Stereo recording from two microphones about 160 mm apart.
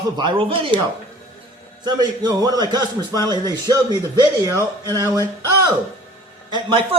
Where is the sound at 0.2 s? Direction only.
30° right (ahead or behind).